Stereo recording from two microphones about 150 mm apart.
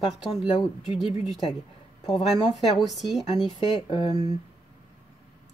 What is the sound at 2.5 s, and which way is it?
Speech, centre (ahead or behind).